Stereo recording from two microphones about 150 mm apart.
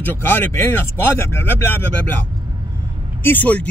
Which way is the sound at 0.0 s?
15° left (ahead or behind).